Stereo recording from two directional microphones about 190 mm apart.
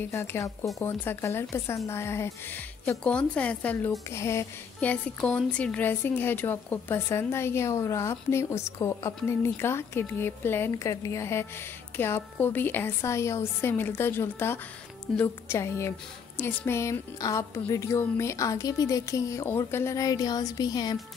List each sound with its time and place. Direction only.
0.0 s a woman's voice: 10° left (ahead or behind)